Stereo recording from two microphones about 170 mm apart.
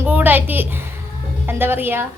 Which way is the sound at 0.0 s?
10° right (ahead or behind).